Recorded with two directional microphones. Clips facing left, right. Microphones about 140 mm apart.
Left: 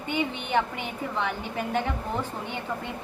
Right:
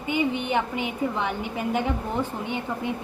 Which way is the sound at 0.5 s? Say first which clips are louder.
Right 1 dB; 10° right (ahead or behind).